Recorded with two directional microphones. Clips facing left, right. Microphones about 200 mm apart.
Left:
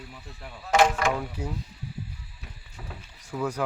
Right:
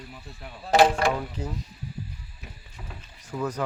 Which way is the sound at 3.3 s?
10° left (ahead or behind).